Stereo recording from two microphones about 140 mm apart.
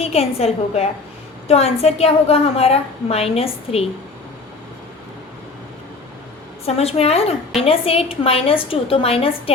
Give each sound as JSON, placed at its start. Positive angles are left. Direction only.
{"t": 0.0, "sound": "a woman's voice", "side_deg": 45}
{"t": 6.7, "sound": "a woman's voice", "side_deg": 45}